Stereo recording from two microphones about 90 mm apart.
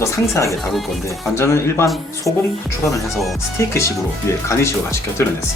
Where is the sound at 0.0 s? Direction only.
35° left (ahead or behind).